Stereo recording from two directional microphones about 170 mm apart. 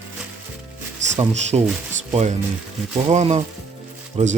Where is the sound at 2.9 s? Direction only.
40° right (ahead or behind).